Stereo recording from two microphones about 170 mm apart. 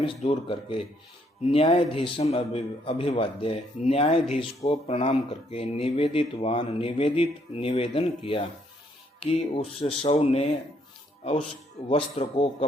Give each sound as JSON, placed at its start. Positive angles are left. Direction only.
{"t": 0.0, "sound": "speech", "side_deg": 30}
{"t": 11.9, "sound": "speech", "side_deg": 35}